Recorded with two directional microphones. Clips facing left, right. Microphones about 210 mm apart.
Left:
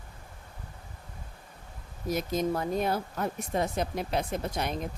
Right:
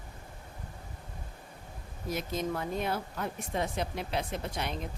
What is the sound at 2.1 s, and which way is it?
A woman's voice, 40° left (ahead or behind).